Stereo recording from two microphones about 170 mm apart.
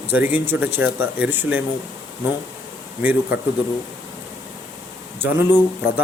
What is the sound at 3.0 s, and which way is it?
Speech, 10° right (ahead or behind).